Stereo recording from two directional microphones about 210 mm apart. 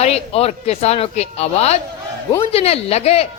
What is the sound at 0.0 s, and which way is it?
A woman's voice, 30° left (ahead or behind).